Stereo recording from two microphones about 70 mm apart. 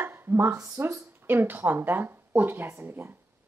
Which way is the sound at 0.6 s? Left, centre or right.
Right.